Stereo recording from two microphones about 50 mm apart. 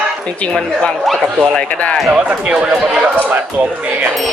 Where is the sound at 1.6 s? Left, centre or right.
Left.